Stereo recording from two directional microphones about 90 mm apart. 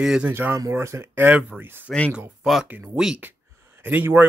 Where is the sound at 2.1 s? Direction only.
5° right (ahead or behind).